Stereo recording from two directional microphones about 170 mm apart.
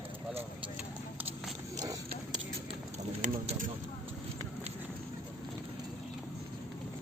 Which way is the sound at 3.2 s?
45° right (ahead or behind).